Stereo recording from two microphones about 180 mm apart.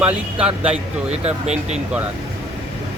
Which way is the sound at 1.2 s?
40° right (ahead or behind).